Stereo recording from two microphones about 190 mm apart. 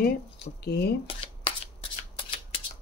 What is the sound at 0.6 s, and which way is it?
Speech, 55° left (ahead or behind).